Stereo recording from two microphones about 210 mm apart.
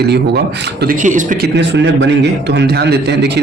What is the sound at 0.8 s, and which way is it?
Speech, 40° right (ahead or behind).